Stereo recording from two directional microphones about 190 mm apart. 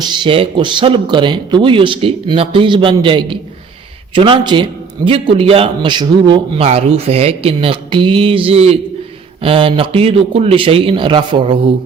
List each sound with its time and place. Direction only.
0.0 s a man's voice: 25° right (ahead or behind)